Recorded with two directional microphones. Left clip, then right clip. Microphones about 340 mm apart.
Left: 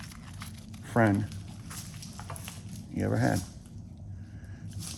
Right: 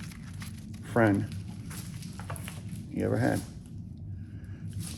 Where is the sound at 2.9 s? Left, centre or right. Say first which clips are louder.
Right 1 dB; left.